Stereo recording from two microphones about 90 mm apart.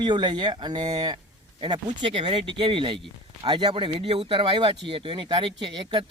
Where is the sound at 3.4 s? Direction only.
55° right (ahead or behind).